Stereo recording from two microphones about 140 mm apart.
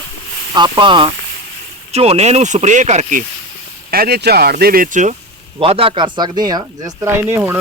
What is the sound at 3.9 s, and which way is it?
Speech, 90° right.